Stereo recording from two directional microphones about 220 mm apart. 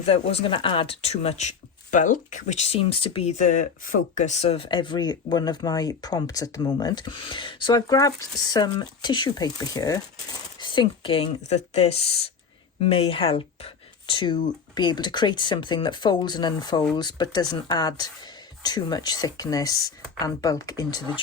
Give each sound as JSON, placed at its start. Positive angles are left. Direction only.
{"t": 0.0, "sound": "speech", "side_deg": 30}